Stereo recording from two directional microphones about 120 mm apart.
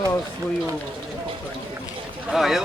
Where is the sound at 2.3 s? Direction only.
Centre (ahead or behind).